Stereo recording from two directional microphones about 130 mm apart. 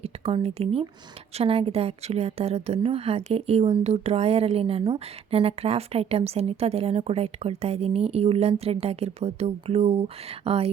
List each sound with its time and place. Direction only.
0.0 s a woman's voice: 50° right (ahead or behind)